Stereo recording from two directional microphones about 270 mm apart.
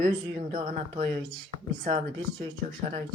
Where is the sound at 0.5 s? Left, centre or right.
Right.